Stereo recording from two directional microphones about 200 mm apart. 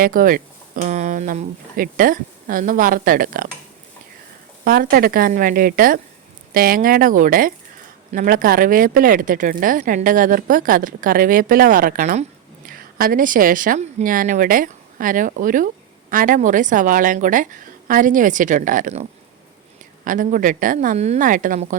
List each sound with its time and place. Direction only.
0.0 s speech: 45° right (ahead or behind)
4.6 s speech: 45° right (ahead or behind)
20.1 s speech: 40° right (ahead or behind)